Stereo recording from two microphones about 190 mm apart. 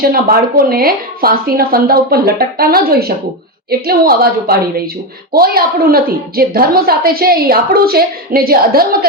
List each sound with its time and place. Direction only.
0.1 s a woman's voice: 50° right (ahead or behind)